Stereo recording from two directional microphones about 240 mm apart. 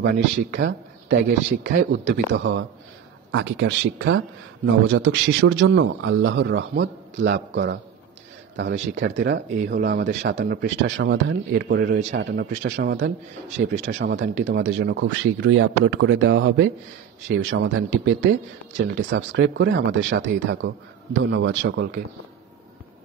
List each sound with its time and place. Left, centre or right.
0.0 s speech: right